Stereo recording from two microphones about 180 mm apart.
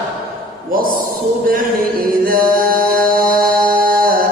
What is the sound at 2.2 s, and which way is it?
Chant, 55° right (ahead or behind).